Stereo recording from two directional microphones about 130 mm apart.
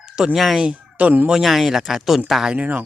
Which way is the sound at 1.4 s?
Centre (ahead or behind).